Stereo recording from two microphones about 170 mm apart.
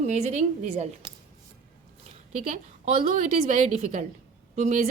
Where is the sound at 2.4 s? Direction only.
40° right (ahead or behind).